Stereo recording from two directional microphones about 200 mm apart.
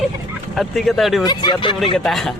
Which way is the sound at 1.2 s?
20° left (ahead or behind).